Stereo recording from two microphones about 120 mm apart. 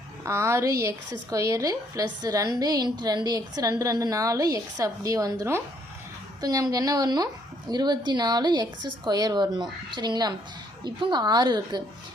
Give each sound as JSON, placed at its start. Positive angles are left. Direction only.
{"t": 0.3, "sound": "a woman's voice", "side_deg": -25}